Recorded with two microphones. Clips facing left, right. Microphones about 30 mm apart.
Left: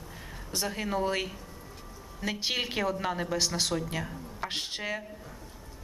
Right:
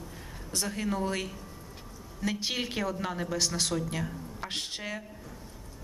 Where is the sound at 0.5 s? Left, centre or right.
Centre.